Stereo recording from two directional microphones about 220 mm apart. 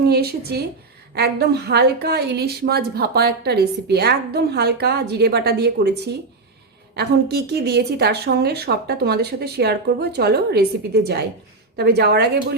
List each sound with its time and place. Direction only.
0.1 s a woman's voice: 45° right (ahead or behind)
6.9 s a woman's voice: 50° right (ahead or behind)